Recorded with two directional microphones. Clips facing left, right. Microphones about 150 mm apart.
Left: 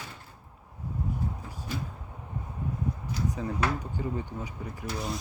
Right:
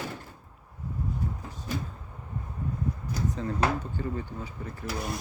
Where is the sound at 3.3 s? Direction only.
10° left (ahead or behind).